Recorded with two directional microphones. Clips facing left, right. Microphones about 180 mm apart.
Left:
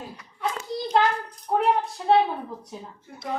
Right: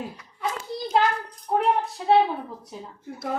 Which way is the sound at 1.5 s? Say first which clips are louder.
Even; 5° right (ahead or behind).